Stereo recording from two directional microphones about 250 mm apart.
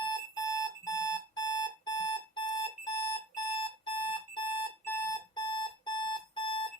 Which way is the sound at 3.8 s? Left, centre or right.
Centre.